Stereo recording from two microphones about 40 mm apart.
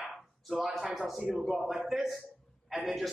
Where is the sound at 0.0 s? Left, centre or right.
Centre.